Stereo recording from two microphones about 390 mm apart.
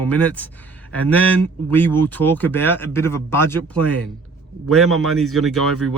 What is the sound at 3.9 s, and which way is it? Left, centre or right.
Speech, right.